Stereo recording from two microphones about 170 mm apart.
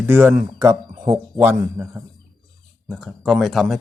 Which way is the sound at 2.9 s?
Centre (ahead or behind).